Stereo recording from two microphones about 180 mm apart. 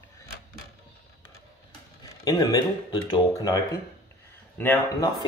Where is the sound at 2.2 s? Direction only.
20° left (ahead or behind).